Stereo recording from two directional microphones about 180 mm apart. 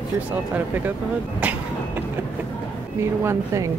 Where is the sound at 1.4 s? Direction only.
10° right (ahead or behind).